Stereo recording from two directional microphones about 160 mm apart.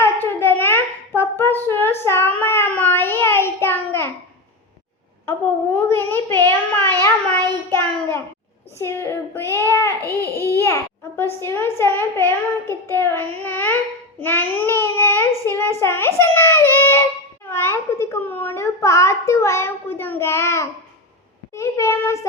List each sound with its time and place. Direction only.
0.0 s child singing: 15° left (ahead or behind)
5.2 s a sound: 15° left (ahead or behind)
8.8 s child singing: 15° left (ahead or behind)
10.1 s babbling: 15° left (ahead or behind)
14.2 s child singing: 10° left (ahead or behind)
21.5 s a sound: 15° left (ahead or behind)